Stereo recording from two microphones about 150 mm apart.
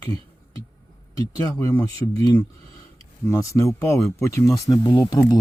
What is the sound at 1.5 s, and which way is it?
Speech, 20° left (ahead or behind).